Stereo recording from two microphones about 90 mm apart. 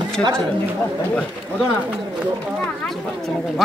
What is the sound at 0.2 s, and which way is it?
Speech, 10° left (ahead or behind).